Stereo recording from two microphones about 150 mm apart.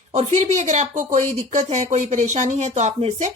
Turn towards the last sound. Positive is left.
turn(degrees=-50)  # may be behind; listen again after turning